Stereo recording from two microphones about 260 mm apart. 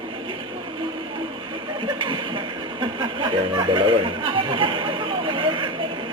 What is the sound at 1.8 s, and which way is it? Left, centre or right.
Speech, centre.